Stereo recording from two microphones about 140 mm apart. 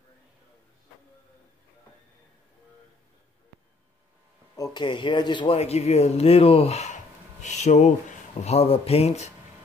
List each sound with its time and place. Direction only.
4.6 s speech: 30° left (ahead or behind); by 9.3 s 50° left (ahead or behind)